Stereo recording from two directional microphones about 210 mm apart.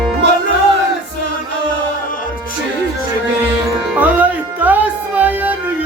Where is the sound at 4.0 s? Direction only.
5° right (ahead or behind).